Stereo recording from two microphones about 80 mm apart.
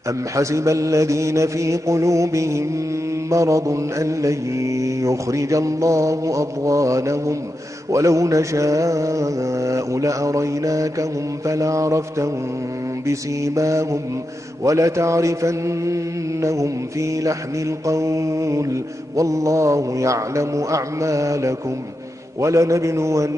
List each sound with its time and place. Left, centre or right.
0.4 s mantra: right